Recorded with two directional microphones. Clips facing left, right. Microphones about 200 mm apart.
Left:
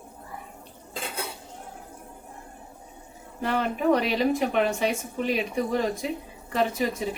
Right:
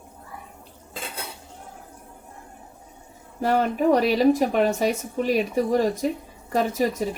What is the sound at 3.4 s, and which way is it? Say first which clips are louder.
A woman's voice: right 3 dB; 45° right (ahead or behind).